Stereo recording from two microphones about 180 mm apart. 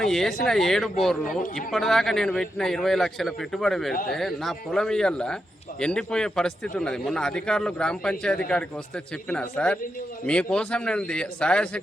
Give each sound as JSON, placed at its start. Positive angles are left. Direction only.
{"t": 0.0, "sound": "a man's voice", "side_deg": 0}
{"t": 9.3, "sound": "a man's voice", "side_deg": 5}